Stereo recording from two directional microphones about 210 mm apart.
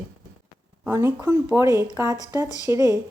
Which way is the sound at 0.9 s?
10° right (ahead or behind).